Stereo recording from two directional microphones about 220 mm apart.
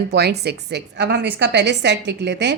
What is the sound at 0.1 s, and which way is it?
A woman's voice, 45° right (ahead or behind).